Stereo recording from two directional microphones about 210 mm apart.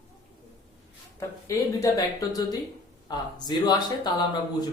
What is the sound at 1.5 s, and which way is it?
Speech, 15° left (ahead or behind).